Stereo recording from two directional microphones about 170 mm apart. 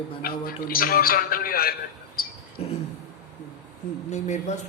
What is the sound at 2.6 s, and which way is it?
Speech, 35° left (ahead or behind).